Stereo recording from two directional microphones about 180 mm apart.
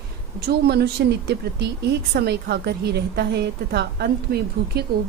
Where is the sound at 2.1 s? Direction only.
65° right (ahead or behind).